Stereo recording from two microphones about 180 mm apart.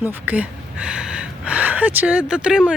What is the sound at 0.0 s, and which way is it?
Speech, 10° right (ahead or behind).